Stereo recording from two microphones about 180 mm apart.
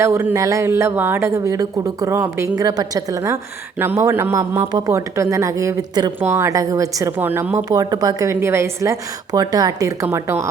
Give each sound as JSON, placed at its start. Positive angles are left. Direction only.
{"t": 0.0, "sound": "a woman's voice", "side_deg": -15}